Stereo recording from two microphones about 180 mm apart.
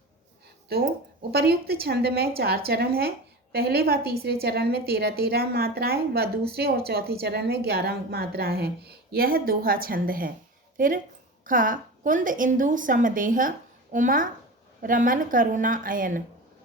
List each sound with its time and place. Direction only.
1.3 s a woman's voice: 60° right (ahead or behind)